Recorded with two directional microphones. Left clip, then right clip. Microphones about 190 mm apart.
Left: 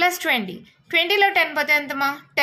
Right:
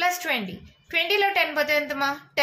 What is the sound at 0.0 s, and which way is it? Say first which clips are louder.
A woman's voice: left 4 dB; 40° left (ahead or behind).